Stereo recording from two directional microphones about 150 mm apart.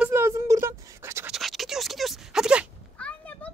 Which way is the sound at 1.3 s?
Centre (ahead or behind).